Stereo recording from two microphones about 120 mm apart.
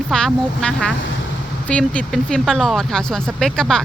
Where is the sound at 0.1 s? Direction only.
5° left (ahead or behind).